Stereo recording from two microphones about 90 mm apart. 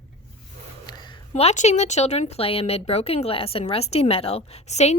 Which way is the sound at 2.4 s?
90° left.